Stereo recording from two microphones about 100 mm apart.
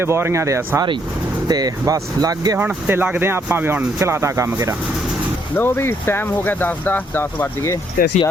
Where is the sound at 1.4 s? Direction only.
40° right (ahead or behind).